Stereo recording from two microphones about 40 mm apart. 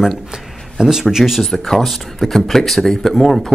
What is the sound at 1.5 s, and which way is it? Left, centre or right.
Speech, centre.